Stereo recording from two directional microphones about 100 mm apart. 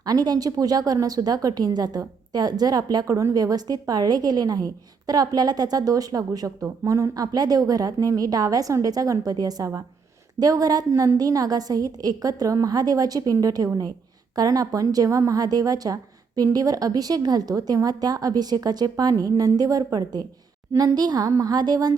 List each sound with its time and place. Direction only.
0.0 s a woman's voice: 40° right (ahead or behind)